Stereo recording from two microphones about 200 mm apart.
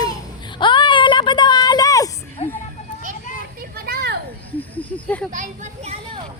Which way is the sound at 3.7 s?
50° right (ahead or behind).